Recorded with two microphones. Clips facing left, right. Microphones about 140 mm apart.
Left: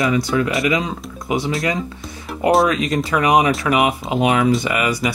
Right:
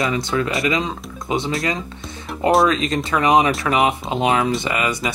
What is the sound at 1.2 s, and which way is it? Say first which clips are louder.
Speech: left 1 dB; 25° right (ahead or behind).